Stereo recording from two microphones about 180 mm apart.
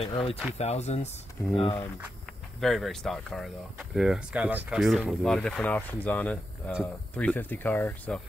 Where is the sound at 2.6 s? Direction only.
Centre (ahead or behind).